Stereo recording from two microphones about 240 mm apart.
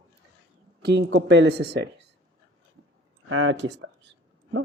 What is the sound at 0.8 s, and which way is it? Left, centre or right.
Speech, right.